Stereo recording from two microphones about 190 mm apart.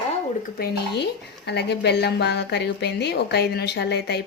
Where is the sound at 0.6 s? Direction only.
60° left (ahead or behind).